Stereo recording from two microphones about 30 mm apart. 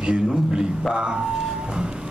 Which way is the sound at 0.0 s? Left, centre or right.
Right.